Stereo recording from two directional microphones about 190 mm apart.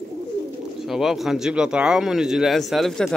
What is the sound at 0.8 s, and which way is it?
Speech, centre (ahead or behind).